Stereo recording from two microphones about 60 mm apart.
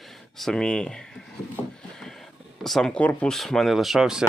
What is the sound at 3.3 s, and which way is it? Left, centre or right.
Speech, centre.